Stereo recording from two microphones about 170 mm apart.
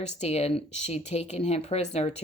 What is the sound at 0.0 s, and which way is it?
Speech, 40° left (ahead or behind).